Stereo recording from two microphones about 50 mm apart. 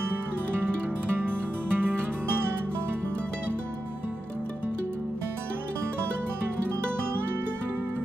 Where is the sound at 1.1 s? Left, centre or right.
Right.